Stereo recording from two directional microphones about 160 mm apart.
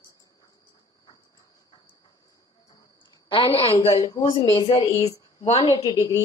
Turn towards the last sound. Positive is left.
turn(degrees=35)  # may be behind; listen again after turning